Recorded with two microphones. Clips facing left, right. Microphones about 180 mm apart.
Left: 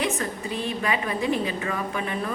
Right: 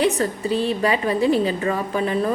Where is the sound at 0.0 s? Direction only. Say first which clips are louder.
Right 7 dB; 30° right (ahead or behind).